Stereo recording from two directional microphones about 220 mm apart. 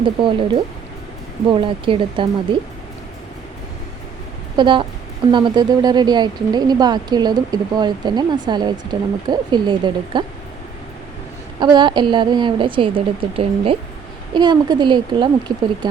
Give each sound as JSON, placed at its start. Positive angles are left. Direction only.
{"t": 0.0, "sound": "speech", "side_deg": -20}
{"t": 4.5, "sound": "speech", "side_deg": -20}
{"t": 11.6, "sound": "speech", "side_deg": -20}